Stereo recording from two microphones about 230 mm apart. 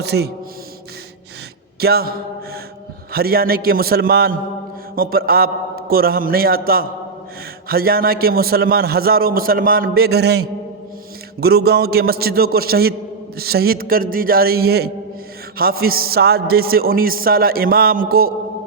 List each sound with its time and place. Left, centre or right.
0.0 s a man's voice: right
1.8 s a man's voice: right